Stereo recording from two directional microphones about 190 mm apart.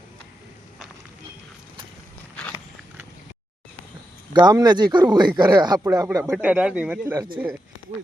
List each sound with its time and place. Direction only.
4.4 s speech: 20° right (ahead or behind)